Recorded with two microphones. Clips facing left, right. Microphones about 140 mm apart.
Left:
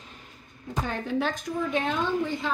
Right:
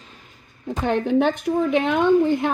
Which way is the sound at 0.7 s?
70° right (ahead or behind).